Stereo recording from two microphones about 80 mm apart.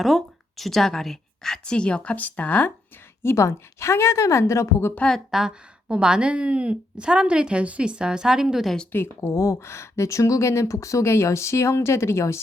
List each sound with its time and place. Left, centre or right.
0.0 s a woman's voice: centre; by 2.7 s left
3.2 s speech: left
4.9 s a woman's voice: centre
5.3 s a woman's voice: centre
8.9 s speech: left